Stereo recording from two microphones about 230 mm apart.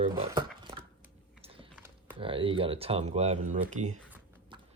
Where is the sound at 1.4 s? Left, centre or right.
Right.